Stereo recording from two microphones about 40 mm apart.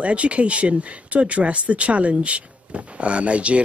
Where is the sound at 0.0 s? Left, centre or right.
Right.